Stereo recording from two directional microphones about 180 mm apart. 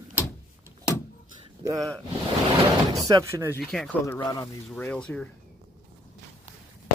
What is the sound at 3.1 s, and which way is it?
Speech, 15° right (ahead or behind).